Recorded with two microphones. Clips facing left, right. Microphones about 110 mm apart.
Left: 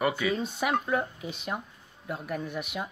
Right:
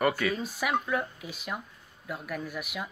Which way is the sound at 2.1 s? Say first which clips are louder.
Left 2 dB; 30° left (ahead or behind).